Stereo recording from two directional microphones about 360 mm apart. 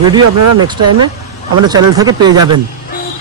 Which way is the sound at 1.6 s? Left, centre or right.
Centre.